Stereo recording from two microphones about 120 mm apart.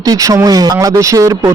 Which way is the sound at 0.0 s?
30° right (ahead or behind).